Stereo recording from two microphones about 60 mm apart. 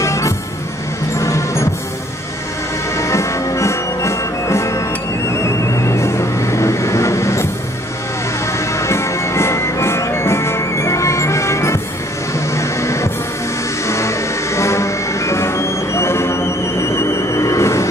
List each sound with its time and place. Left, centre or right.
0.0 s music: left
3.0 s music: left
5.3 s vehicle: left
8.5 s music: left